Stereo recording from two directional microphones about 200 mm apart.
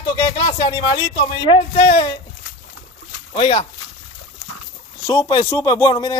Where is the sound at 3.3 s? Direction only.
30° left (ahead or behind).